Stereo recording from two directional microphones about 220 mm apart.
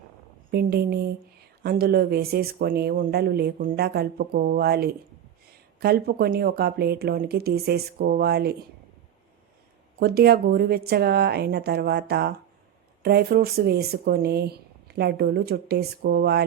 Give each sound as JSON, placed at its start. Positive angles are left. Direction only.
{"t": 0.5, "sound": "speech", "side_deg": -45}
{"t": 10.0, "sound": "speech", "side_deg": -45}